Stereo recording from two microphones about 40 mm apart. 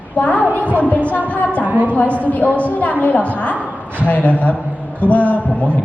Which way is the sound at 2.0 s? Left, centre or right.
Left.